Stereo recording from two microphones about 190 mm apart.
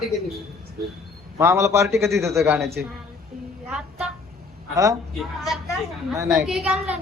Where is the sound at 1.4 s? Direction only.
15° right (ahead or behind).